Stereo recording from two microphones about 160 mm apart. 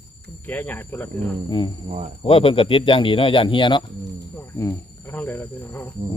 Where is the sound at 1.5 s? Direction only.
30° left (ahead or behind).